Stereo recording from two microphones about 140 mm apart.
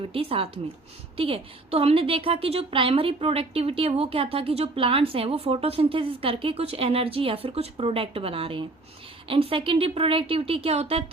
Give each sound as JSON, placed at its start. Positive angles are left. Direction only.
{"t": 0.1, "sound": "a woman's voice", "side_deg": -40}